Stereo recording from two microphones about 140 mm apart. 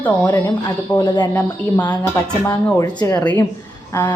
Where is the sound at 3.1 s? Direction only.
15° left (ahead or behind).